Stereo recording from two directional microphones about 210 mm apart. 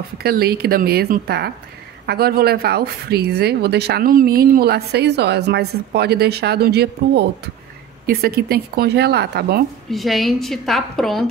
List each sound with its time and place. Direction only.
0.2 s speech: 50° right (ahead or behind)
9.8 s a woman's voice: centre (ahead or behind)